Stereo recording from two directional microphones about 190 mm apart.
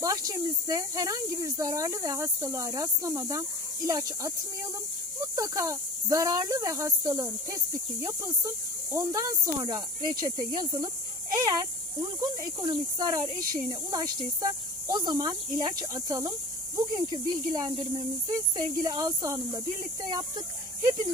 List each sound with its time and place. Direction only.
0.0 s speech: 20° right (ahead or behind)
5.4 s speech: 15° right (ahead or behind)